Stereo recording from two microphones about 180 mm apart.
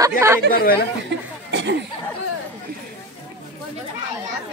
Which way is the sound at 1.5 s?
80° right.